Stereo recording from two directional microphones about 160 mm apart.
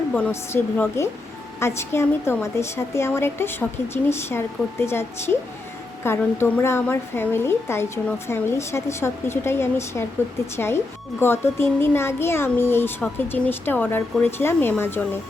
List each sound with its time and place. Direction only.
0.1 s a woman's voice: 10° left (ahead or behind)